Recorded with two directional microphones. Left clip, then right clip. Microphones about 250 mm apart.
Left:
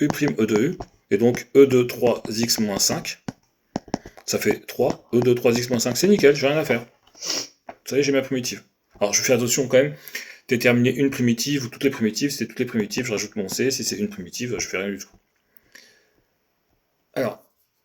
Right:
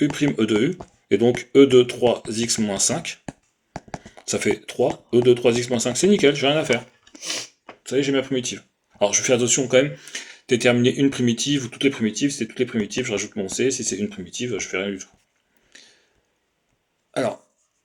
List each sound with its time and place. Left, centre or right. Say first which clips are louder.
0.0 s speech: even; right
7.2 s sneeze: left 2 dB; left
7.9 s speech: left 1 dB; right
15.7 s a sound: even; right
17.1 s speech: right 1 dB; right